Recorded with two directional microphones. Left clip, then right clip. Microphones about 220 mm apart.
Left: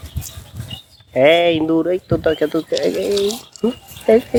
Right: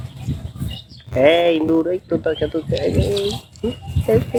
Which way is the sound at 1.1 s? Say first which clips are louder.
Left 1 dB; 20° left (ahead or behind).